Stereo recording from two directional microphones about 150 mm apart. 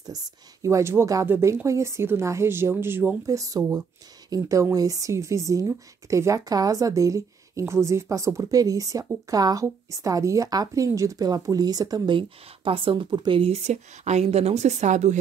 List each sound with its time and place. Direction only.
0.0 s speech: 25° right (ahead or behind); by 15.1 s 50° right (ahead or behind)